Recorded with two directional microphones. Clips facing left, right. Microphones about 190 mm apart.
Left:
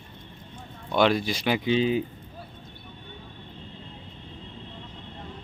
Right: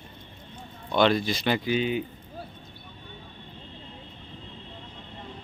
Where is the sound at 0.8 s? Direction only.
10° left (ahead or behind).